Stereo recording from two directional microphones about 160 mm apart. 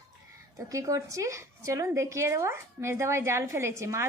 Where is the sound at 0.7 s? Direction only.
20° right (ahead or behind).